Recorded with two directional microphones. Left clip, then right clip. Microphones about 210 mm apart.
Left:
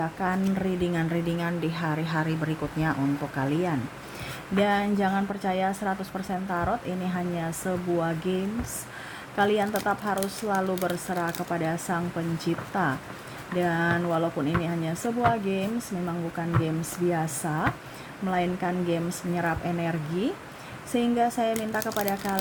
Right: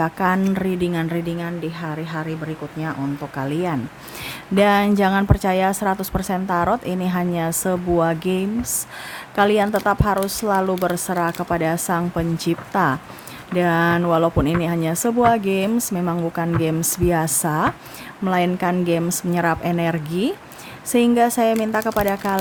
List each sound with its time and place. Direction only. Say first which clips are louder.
0.0 s speech: right 8 dB; 25° right (ahead or behind); by 2.3 s 5° right (ahead or behind)
3.3 s speech: right 7 dB; 20° right (ahead or behind)